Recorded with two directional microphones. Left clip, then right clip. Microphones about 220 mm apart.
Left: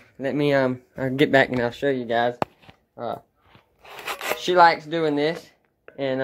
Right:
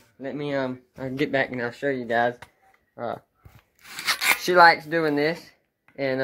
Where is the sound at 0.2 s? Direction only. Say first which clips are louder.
Left 7 dB; 45° left (ahead or behind); by 1.7 s 25° left (ahead or behind).